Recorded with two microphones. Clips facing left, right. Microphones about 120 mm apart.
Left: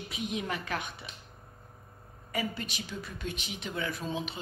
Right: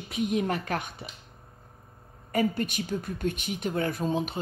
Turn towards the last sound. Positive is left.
turn(degrees=-45)  # may be behind; listen again after turning